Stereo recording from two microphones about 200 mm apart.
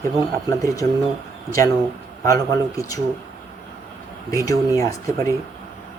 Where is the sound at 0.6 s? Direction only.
15° left (ahead or behind).